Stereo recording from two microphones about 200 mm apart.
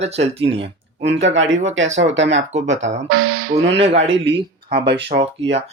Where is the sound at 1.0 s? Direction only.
60° right (ahead or behind).